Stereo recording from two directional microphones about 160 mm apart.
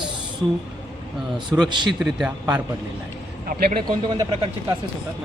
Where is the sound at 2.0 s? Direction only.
5° right (ahead or behind).